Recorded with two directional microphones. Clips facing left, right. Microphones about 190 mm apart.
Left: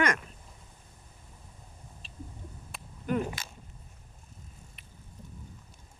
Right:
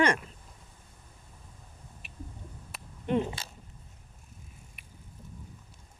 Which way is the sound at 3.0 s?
30° right (ahead or behind).